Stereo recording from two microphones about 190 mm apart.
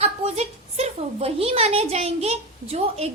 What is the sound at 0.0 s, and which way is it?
A woman's voice, 35° right (ahead or behind).